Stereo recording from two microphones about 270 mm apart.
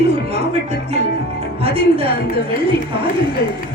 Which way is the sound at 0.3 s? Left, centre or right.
Right.